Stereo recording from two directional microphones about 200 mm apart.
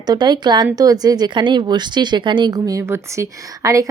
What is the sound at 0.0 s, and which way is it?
Speech, 20° right (ahead or behind).